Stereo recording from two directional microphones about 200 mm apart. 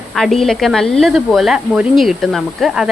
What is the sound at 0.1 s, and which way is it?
Speech, centre (ahead or behind).